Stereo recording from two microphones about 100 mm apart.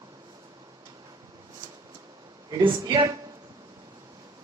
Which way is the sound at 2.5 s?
55° right (ahead or behind).